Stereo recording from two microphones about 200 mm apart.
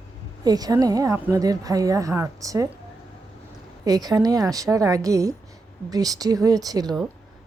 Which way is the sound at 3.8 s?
20° right (ahead or behind).